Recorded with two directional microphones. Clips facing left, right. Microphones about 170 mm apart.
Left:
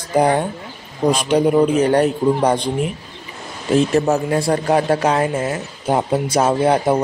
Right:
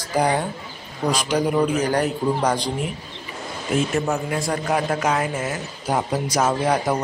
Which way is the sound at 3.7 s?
35° left (ahead or behind).